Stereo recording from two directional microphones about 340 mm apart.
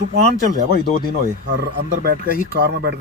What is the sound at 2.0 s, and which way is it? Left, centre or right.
Speech, right.